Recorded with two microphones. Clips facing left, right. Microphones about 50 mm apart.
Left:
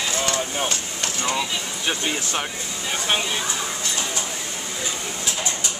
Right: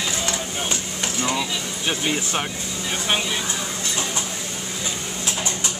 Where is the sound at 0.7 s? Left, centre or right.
Centre.